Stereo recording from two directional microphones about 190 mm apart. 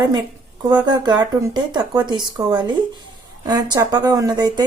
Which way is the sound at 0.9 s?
20° right (ahead or behind).